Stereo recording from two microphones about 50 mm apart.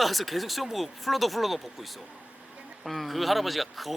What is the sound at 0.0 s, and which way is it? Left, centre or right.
Speech, centre.